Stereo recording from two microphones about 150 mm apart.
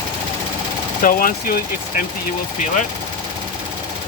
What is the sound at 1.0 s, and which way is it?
Speech, 65° left (ahead or behind).